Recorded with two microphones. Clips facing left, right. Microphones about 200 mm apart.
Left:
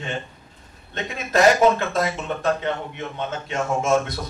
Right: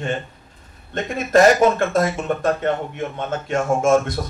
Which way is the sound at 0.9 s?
50° right (ahead or behind).